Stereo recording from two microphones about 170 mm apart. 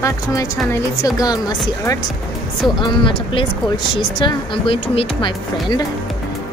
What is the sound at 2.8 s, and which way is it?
Speech, 30° left (ahead or behind).